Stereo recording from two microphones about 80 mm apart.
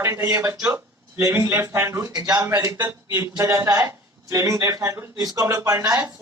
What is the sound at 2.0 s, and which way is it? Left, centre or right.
Speech, right.